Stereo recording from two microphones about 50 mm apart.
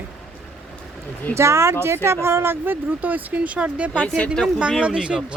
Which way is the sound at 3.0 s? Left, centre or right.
Right.